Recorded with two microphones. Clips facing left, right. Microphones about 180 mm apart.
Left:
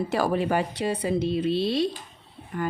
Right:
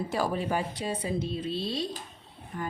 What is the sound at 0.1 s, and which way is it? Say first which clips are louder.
Speech: left 5 dB; 70° left (ahead or behind).